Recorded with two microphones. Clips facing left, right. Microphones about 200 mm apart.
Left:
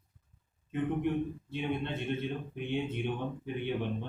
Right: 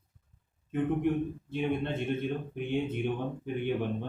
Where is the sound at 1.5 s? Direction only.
50° right (ahead or behind).